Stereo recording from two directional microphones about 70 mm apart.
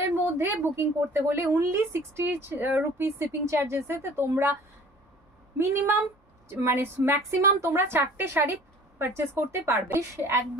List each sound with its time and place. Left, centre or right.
0.1 s a sound: right
0.7 s a woman's voice: right
5.6 s a woman's voice: right